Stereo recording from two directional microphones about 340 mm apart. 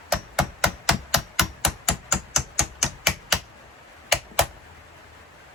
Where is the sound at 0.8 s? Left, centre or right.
Centre.